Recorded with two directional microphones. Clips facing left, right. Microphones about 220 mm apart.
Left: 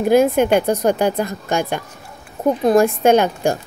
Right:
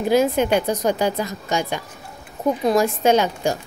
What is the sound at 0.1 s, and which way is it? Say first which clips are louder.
Speech: left 4 dB; 55° left (ahead or behind).